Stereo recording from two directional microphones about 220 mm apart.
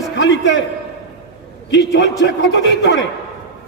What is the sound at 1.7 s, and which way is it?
A man's voice, 55° left (ahead or behind).